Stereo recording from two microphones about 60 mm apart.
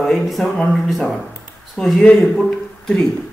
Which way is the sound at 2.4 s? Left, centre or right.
Centre.